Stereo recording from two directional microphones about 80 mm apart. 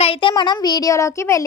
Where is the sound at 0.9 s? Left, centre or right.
Left.